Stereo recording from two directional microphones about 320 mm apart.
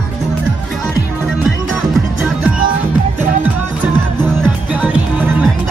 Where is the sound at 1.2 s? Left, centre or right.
Centre.